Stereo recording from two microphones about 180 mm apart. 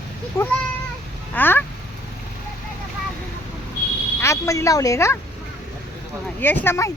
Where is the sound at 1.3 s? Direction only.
10° left (ahead or behind).